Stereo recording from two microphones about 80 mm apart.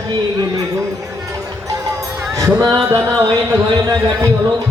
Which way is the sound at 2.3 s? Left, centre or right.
Right.